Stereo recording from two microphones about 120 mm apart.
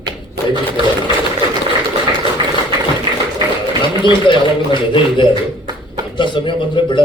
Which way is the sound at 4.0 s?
40° left (ahead or behind).